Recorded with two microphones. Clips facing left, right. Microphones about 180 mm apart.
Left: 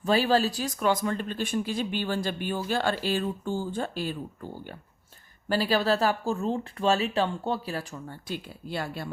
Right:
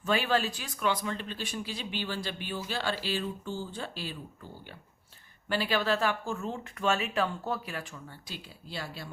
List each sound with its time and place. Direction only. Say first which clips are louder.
0.0 s speech: left 5 dB; 35° left (ahead or behind)
5.5 s speech: left 4 dB; 40° left (ahead or behind)
8.3 s speech: left 9 dB; 55° left (ahead or behind)